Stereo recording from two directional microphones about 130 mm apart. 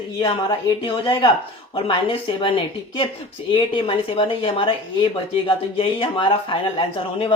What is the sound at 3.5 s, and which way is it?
Speech, 40° left (ahead or behind).